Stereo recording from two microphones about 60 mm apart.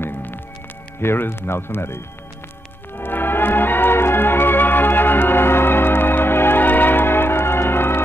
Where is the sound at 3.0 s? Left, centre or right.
Left.